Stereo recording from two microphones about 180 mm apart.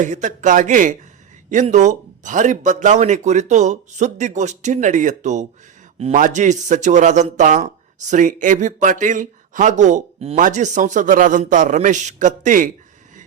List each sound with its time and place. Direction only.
0.0 s a man's voice: 45° right (ahead or behind)